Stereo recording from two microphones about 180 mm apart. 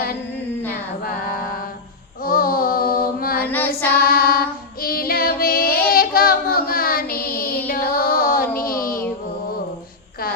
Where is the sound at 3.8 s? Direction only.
55° left (ahead or behind).